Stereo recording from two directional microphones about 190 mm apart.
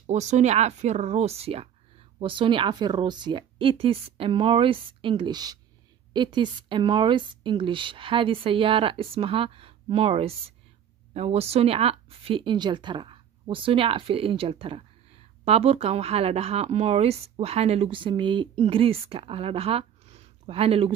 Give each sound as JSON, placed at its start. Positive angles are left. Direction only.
{"t": 0.0, "sound": "a woman's voice", "side_deg": -40}